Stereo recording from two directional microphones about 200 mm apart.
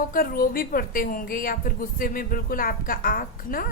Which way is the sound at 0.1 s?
45° left (ahead or behind).